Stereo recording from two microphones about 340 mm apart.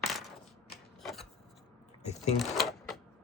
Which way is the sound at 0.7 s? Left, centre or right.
Centre.